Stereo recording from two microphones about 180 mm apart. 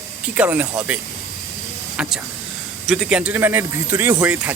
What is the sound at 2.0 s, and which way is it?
Speech, centre (ahead or behind).